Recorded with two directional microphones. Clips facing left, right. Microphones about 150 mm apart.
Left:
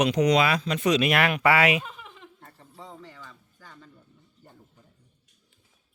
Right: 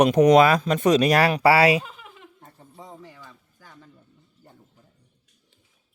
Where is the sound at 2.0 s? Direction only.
15° right (ahead or behind).